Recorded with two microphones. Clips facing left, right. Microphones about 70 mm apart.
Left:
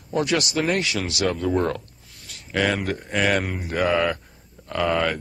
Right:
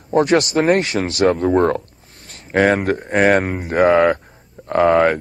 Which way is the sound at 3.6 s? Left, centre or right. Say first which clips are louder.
Right 9 dB; right.